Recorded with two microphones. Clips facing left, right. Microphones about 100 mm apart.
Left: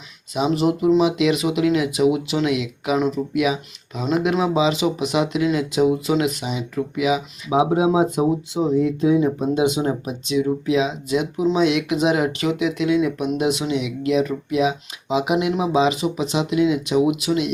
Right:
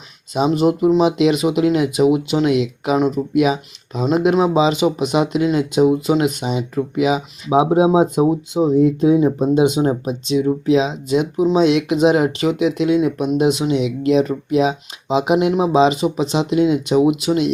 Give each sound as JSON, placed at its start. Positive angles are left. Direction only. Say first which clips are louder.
{"t": 0.3, "sound": "speech", "louder": "right 4 dB", "side_deg": -25}